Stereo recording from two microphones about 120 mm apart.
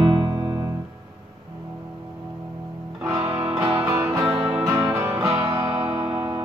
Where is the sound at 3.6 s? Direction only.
25° right (ahead or behind).